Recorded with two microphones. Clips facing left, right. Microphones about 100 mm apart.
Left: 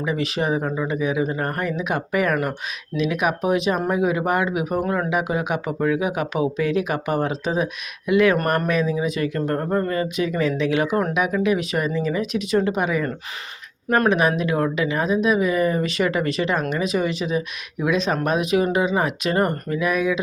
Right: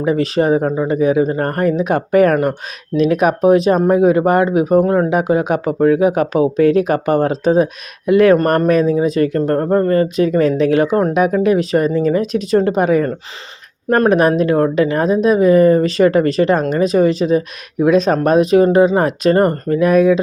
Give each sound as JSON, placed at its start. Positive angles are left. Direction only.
{"t": 0.0, "sound": "speech", "side_deg": -40}
{"t": 2.3, "sound": "speech", "side_deg": -30}